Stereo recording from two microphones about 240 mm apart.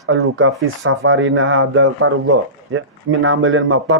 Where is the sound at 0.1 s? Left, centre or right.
Right.